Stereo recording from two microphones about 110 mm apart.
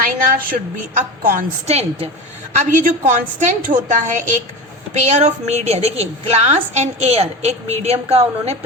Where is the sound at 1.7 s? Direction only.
70° right (ahead or behind).